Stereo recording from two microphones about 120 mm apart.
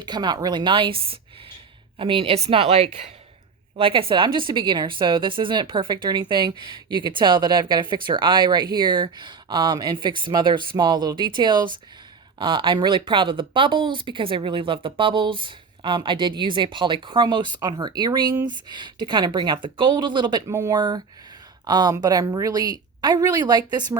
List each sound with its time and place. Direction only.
0.0 s a woman's voice: 35° right (ahead or behind)
20.5 s speech: 20° right (ahead or behind)
20.7 s a woman's voice: 35° right (ahead or behind)